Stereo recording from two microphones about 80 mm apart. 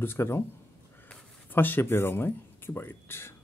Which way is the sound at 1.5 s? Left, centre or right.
Left.